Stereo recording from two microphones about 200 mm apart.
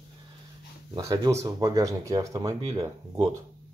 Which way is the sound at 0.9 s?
20° right (ahead or behind).